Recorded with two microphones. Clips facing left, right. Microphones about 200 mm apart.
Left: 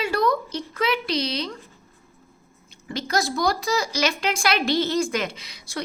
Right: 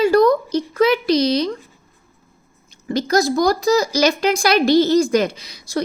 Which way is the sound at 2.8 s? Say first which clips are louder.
Right 8 dB; 40° right (ahead or behind).